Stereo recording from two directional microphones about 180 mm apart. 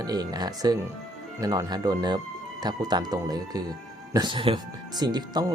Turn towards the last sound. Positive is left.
turn(degrees=-25)  # may be behind; listen again after turning